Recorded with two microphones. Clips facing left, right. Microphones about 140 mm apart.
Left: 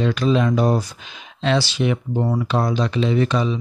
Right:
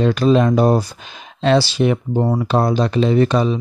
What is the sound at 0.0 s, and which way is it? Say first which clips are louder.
Speech: right 4 dB; 40° right (ahead or behind).